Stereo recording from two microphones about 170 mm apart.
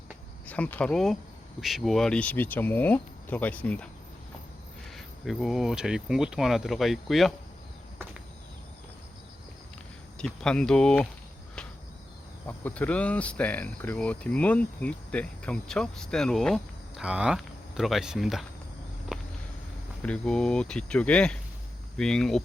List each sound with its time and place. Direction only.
0.4 s speech: 10° left (ahead or behind)
4.9 s speech: centre (ahead or behind)
10.2 s speech: 5° left (ahead or behind)
12.5 s speech: 10° left (ahead or behind)
19.1 s walk: 5° right (ahead or behind)
20.0 s speech: 5° left (ahead or behind)